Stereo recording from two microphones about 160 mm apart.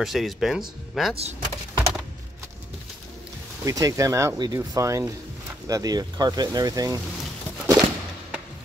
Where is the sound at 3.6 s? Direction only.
20° right (ahead or behind).